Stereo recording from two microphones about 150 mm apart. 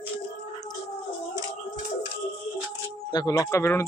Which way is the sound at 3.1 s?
25° left (ahead or behind).